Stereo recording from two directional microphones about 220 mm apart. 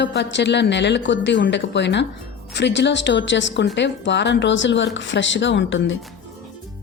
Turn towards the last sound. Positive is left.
turn(degrees=55)  # may be behind; listen again after turning